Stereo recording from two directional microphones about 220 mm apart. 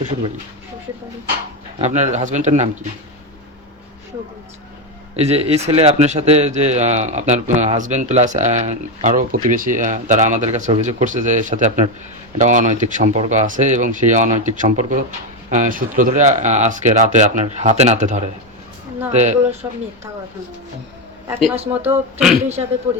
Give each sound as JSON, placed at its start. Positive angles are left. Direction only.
{"t": 1.8, "sound": "a man's voice", "side_deg": -30}
{"t": 5.1, "sound": "a man's voice", "side_deg": -30}
{"t": 21.8, "sound": "speech", "side_deg": -5}
{"t": 22.6, "sound": "speech", "side_deg": -20}